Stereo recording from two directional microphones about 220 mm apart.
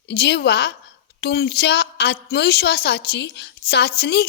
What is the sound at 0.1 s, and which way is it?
A woman's voice, 50° left (ahead or behind).